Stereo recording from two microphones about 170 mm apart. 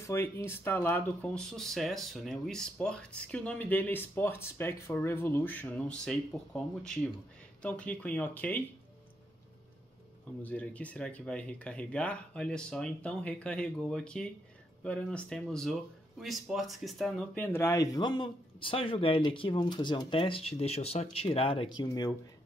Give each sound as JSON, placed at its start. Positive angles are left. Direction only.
{"t": 0.0, "sound": "speech", "side_deg": 15}
{"t": 10.4, "sound": "speech", "side_deg": 10}
{"t": 17.4, "sound": "speech", "side_deg": 15}